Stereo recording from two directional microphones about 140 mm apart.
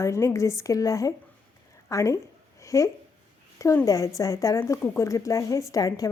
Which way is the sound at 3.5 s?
20° left (ahead or behind).